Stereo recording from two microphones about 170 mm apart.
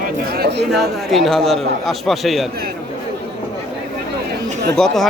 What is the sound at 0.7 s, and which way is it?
A man's voice, centre (ahead or behind).